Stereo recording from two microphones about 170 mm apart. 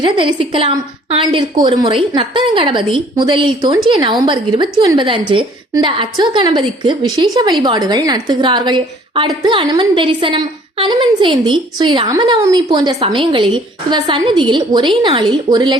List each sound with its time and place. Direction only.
0.0 s a woman's voice: 30° right (ahead or behind)